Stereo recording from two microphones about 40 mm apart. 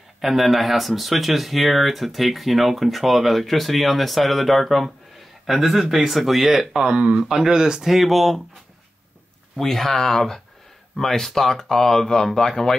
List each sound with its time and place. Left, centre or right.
0.2 s speech: centre
6.8 s speech: right
7.2 s speech: centre
9.6 s speech: centre